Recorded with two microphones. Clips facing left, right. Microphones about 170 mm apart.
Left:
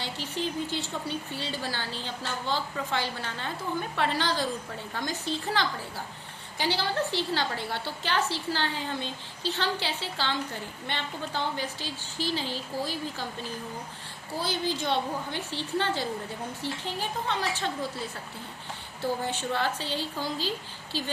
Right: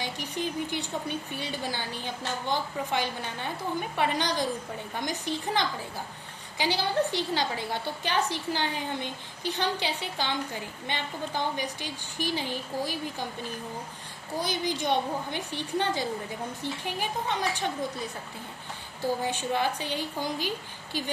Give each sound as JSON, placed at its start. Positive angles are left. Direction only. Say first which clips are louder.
{"t": 0.0, "sound": "a woman's voice", "louder": "even", "side_deg": -15}
{"t": 14.3, "sound": "a woman's voice", "louder": "even", "side_deg": -15}
{"t": 19.2, "sound": "a woman's voice", "louder": "right 1 dB", "side_deg": -15}